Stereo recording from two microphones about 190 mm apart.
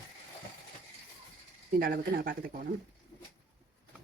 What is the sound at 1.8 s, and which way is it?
Speech, 50° right (ahead or behind).